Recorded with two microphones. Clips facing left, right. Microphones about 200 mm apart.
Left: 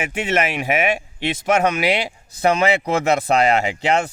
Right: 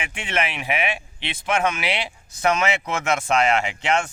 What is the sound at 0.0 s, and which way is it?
Speech, 40° left (ahead or behind).